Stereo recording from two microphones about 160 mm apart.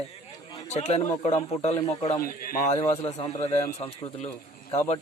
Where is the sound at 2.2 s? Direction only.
65° left (ahead or behind).